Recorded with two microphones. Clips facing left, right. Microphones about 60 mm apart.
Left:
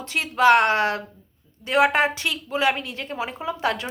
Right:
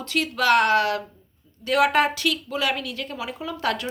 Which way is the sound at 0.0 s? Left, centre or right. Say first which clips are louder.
Left 4 dB; left.